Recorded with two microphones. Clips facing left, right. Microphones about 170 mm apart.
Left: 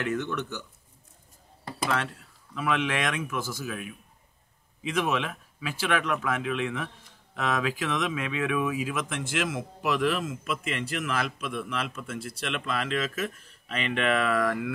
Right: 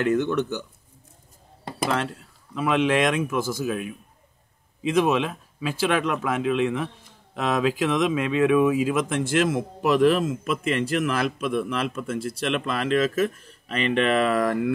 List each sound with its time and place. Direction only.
0.0 s speech: 30° right (ahead or behind)
4.8 s speech: 35° right (ahead or behind)